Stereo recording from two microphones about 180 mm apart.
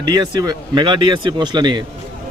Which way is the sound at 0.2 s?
20° right (ahead or behind).